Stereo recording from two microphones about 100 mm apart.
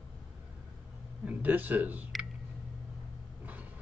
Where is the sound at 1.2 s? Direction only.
15° right (ahead or behind).